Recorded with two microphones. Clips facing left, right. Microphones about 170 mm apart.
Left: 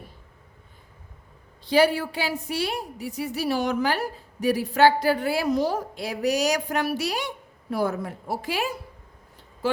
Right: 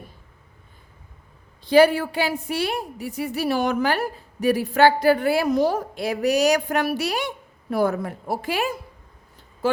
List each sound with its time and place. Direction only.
1.6 s a woman's voice: 55° right (ahead or behind)